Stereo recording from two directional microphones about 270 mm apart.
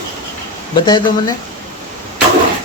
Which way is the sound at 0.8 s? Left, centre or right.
Centre.